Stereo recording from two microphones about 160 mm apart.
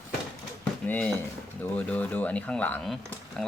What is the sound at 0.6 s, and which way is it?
Pigeon, 10° left (ahead or behind).